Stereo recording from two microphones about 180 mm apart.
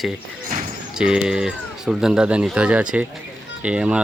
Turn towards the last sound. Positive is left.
turn(degrees=-5)  # may be behind; listen again after turning